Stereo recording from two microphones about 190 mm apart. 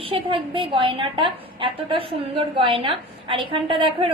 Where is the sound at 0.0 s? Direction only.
30° right (ahead or behind).